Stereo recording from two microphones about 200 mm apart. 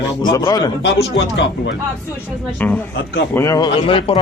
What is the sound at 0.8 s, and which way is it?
Speech, 65° left (ahead or behind).